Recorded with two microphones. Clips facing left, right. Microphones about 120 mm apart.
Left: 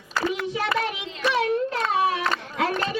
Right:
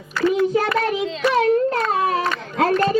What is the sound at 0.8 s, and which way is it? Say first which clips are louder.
Child singing: right 7 dB; 45° right (ahead or behind).